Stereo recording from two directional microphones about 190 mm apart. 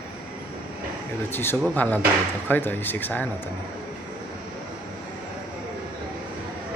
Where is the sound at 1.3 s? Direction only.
10° left (ahead or behind).